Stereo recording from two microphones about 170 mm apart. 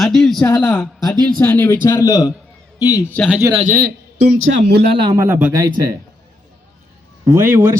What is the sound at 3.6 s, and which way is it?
Speech, 50° right (ahead or behind).